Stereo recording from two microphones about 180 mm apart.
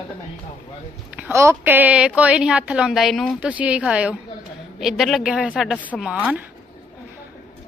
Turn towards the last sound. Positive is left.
turn(degrees=0)  # may be behind; listen again after turning